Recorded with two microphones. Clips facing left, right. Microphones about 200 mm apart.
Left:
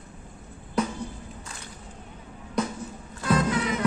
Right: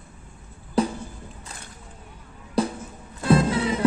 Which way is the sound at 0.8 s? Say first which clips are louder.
Right 4 dB; 30° right (ahead or behind).